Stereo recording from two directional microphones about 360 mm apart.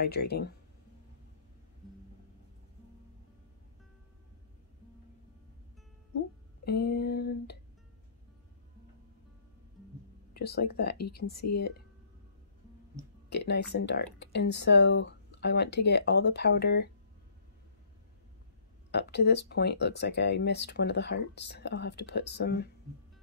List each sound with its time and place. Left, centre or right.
0.0 s speech: left
6.6 s speech: left
10.3 s speech: left
13.3 s speech: left
18.9 s speech: left